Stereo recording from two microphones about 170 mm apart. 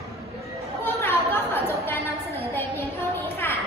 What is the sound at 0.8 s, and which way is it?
Chatter, 15° left (ahead or behind).